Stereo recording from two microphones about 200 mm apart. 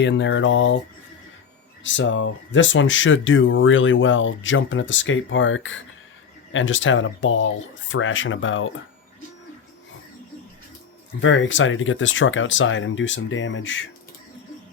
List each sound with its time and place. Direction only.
0.0 s speech: 65° left (ahead or behind)
1.8 s speech: 65° left (ahead or behind)
11.2 s speech: 70° left (ahead or behind)